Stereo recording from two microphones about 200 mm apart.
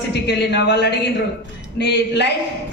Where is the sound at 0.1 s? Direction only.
60° left (ahead or behind).